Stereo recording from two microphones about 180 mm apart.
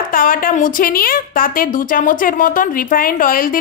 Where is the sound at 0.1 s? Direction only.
50° left (ahead or behind).